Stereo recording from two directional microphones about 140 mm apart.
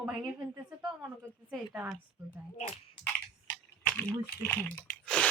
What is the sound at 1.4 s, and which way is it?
Speech, 10° right (ahead or behind).